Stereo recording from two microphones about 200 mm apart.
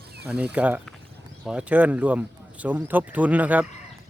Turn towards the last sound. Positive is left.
turn(degrees=-10)  # may be behind; listen again after turning